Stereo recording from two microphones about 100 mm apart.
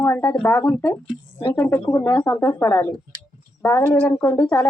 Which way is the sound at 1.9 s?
25° left (ahead or behind).